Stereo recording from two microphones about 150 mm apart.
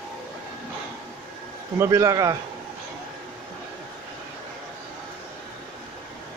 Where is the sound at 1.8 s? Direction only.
20° right (ahead or behind).